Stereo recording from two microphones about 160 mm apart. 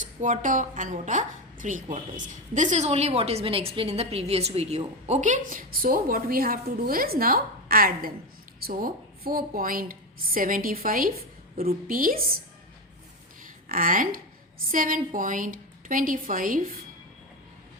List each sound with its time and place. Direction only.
0.0 s a woman's voice: 55° right (ahead or behind)
13.4 s a sound: 60° right (ahead or behind)
14.7 s a woman's voice: 60° right (ahead or behind)